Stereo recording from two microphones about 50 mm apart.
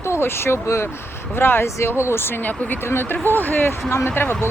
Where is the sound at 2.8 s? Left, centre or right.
Left.